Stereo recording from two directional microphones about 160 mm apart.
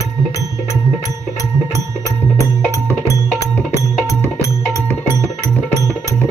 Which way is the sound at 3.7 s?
20° left (ahead or behind).